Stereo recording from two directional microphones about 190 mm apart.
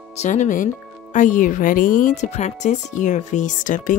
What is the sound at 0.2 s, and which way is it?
Speech, 40° left (ahead or behind).